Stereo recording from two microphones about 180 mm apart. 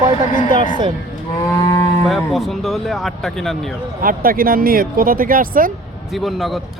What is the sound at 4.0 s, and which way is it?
Speech, 50° right (ahead or behind).